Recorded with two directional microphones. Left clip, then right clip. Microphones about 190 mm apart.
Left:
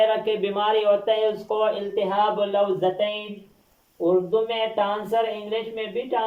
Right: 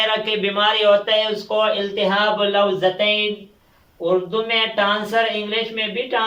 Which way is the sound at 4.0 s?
15° left (ahead or behind).